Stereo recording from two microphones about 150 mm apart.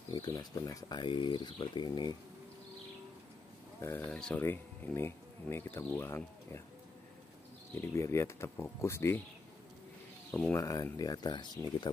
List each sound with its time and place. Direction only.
0.1 s speech: 25° left (ahead or behind)
3.8 s speech: 15° left (ahead or behind)
4.1 s speech: 5° left (ahead or behind)
4.4 s speech: 15° left (ahead or behind)
7.7 s speech: 15° left (ahead or behind)
10.3 s speech: 10° left (ahead or behind)
10.6 s speech: 25° left (ahead or behind)